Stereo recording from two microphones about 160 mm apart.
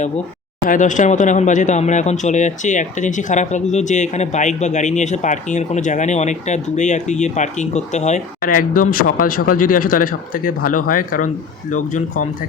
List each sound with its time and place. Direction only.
0.6 s speech: 55° left (ahead or behind)